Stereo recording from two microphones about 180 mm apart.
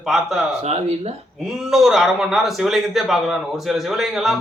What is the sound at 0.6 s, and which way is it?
Speech, 35° right (ahead or behind).